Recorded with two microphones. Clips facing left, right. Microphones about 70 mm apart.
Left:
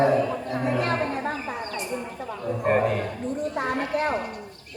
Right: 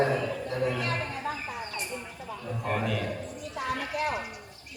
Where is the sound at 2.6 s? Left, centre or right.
Left.